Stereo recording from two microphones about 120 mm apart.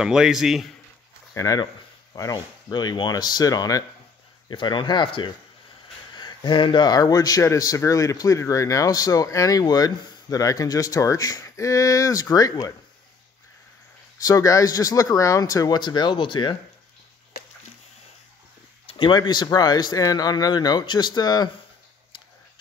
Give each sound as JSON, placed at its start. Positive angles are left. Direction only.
{"t": 0.0, "sound": "a man's voice", "side_deg": -5}
{"t": 1.3, "sound": "speech", "side_deg": 30}
{"t": 14.2, "sound": "speech", "side_deg": 30}
{"t": 18.9, "sound": "speech", "side_deg": 40}